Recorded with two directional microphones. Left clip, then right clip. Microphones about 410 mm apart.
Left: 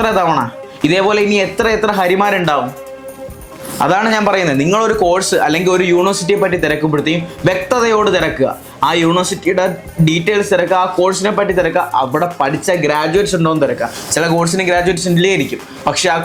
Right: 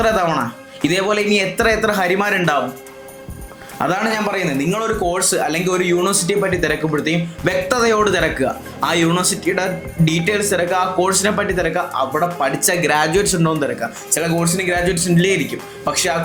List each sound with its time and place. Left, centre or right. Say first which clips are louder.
0.0 s speech: left 3 dB; centre
3.8 s a man's voice: left 6 dB; centre
4.3 s speech: left 7 dB; left; by 13.7 s centre
14.1 s a man's voice: left 5 dB; left